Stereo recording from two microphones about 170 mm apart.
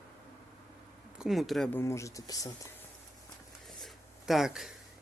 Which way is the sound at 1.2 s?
Centre (ahead or behind).